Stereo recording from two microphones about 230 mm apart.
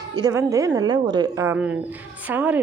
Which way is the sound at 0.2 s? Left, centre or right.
Centre.